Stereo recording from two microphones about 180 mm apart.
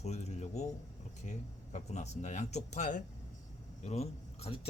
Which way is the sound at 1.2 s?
40° left (ahead or behind).